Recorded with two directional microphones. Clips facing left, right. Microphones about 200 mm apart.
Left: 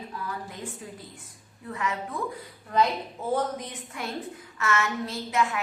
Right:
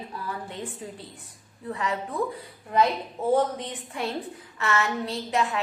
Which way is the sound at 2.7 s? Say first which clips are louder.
Right 1 dB; 20° right (ahead or behind).